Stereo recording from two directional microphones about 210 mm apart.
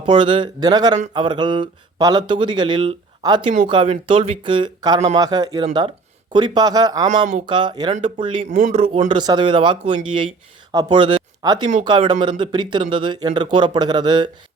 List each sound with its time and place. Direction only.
0.0 s speech: 20° right (ahead or behind)
8.4 s speech: 35° right (ahead or behind)